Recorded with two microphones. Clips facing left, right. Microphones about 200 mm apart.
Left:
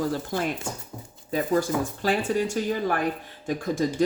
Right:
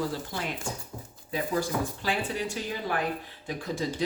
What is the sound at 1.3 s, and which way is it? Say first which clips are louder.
Speech: left 5 dB; 45° left (ahead or behind).